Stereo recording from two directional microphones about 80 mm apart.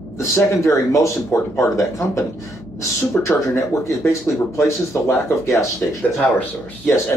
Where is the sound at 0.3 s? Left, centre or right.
Left.